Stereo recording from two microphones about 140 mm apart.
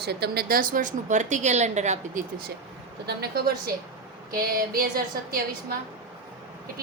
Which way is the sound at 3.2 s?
90° right.